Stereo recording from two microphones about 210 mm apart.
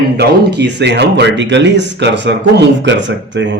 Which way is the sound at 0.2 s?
50° right (ahead or behind).